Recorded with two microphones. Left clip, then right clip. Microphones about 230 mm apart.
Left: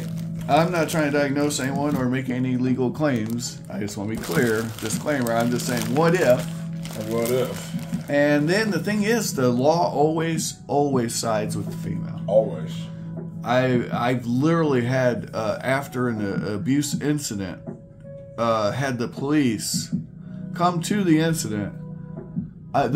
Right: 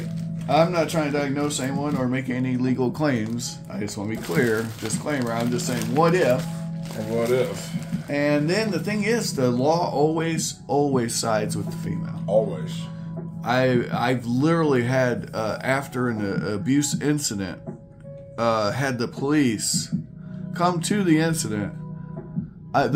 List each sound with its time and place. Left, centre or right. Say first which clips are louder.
0.5 s speech: even; centre
8.1 s speech: left 3 dB; centre
13.5 s speech: even; centre
22.7 s a man's voice: even; centre